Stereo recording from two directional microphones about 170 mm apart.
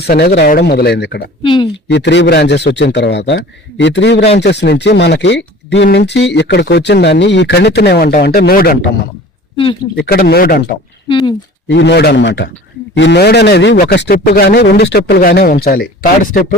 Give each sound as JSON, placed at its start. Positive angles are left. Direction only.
{"t": 0.0, "sound": "speech", "side_deg": 70}
{"t": 1.4, "sound": "speech", "side_deg": 30}
{"t": 1.9, "sound": "a man's voice", "side_deg": 90}
{"t": 9.9, "sound": "speech", "side_deg": 65}
{"t": 11.1, "sound": "speech", "side_deg": 25}
{"t": 11.7, "sound": "a man's voice", "side_deg": 90}
{"t": 14.0, "sound": "speech", "side_deg": 60}